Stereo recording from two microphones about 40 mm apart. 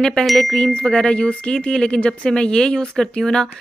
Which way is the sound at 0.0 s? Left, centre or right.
Centre.